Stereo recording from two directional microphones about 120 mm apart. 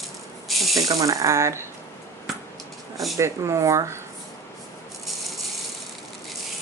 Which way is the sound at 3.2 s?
25° right (ahead or behind).